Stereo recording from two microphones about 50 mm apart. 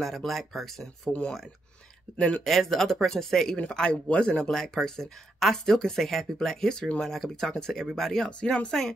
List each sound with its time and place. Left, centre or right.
0.0 s speech: centre
2.4 s speech: centre
4.5 s speech: centre
8.3 s speech: left